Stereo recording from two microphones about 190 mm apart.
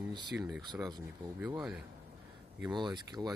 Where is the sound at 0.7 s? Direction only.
20° right (ahead or behind).